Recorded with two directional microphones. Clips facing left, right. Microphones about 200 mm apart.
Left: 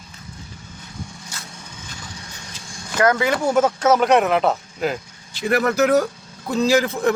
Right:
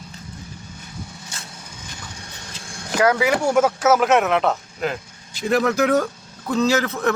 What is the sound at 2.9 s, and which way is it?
Speech, 10° right (ahead or behind).